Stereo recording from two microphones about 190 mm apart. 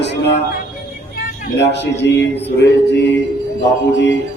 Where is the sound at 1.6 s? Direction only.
65° left (ahead or behind).